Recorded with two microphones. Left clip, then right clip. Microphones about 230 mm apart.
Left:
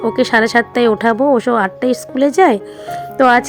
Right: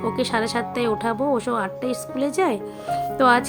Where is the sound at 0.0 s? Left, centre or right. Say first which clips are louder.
Left 10 dB; left.